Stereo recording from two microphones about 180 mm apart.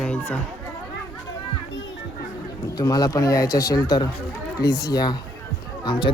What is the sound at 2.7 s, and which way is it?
Speech, 20° left (ahead or behind).